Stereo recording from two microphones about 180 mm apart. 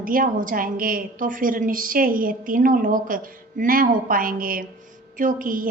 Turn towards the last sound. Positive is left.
turn(degrees=-50)  # may be behind; listen again after turning